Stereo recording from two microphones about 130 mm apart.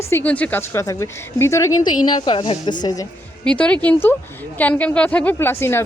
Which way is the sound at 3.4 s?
10° left (ahead or behind).